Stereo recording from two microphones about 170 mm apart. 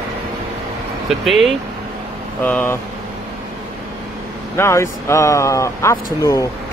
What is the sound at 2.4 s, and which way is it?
Speech, 10° left (ahead or behind).